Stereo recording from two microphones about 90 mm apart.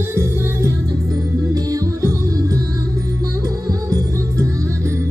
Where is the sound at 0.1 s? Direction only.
35° right (ahead or behind).